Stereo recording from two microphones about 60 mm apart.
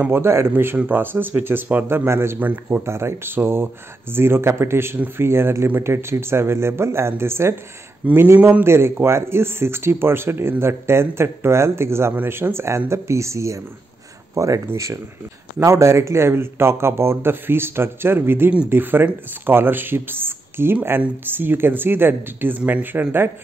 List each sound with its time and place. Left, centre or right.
0.1 s a man's voice: right
2.8 s a man's voice: right
8.0 s a man's voice: right
8.6 s a man's voice: right
15.6 s a man's voice: right